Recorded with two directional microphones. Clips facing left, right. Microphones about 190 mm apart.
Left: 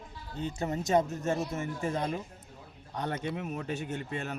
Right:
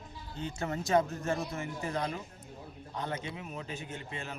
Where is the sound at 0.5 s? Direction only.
20° left (ahead or behind).